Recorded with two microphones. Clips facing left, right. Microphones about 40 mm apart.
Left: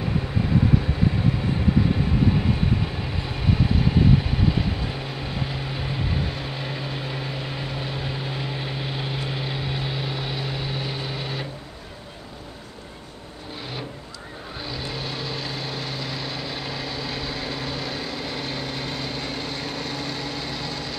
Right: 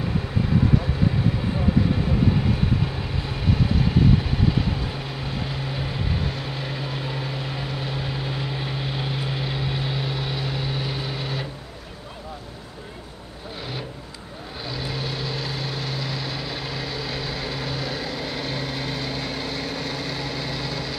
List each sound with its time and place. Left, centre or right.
2.2 s vehicle: centre
14.7 s vehicle: centre